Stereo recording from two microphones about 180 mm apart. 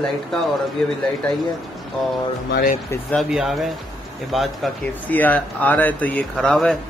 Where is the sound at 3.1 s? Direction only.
Centre (ahead or behind).